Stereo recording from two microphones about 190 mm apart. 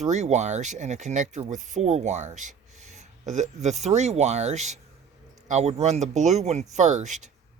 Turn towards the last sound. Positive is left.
turn(degrees=-40)  # may be behind; listen again after turning